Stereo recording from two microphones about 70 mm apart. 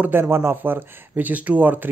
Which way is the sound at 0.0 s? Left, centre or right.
Right.